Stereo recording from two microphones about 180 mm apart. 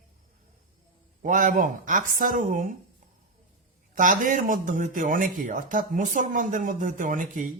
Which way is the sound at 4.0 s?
45° right (ahead or behind).